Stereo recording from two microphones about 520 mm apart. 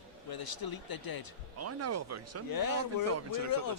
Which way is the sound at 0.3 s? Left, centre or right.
Left.